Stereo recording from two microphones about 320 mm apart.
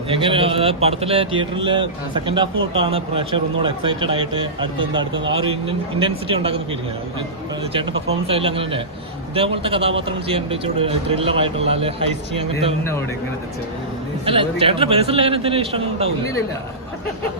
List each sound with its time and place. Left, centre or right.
0.1 s a man's voice: centre
8.3 s a man's voice: centre
14.3 s a man's voice: centre